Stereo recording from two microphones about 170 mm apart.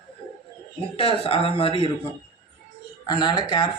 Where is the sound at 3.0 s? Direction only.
25° left (ahead or behind).